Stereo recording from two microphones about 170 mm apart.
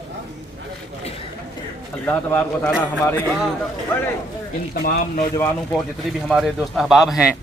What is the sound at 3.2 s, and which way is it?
Speech, 5° right (ahead or behind).